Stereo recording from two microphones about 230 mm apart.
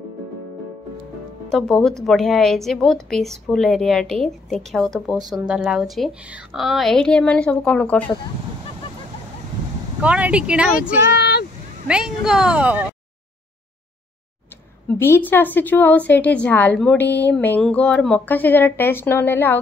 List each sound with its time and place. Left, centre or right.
1.5 s a woman's voice: centre
10.0 s a woman's voice: centre
11.1 s vehicle: left
11.9 s a woman's voice: centre
14.9 s a woman's voice: centre